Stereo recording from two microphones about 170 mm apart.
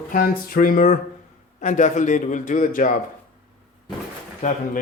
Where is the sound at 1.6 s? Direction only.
45° left (ahead or behind).